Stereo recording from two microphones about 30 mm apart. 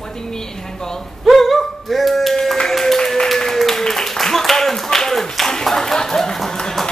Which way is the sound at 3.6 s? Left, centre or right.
Centre.